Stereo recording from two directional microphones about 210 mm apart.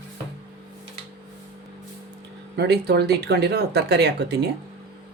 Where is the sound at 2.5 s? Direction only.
50° right (ahead or behind).